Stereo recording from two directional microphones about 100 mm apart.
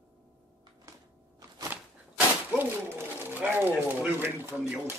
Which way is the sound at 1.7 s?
20° right (ahead or behind).